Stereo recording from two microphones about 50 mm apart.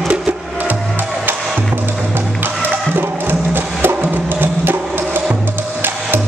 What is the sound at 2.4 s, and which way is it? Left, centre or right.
Music, right.